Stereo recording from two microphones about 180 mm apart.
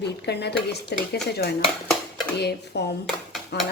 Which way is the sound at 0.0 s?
70° left (ahead or behind).